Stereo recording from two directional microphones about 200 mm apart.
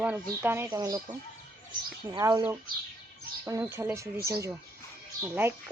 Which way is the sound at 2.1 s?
20° right (ahead or behind).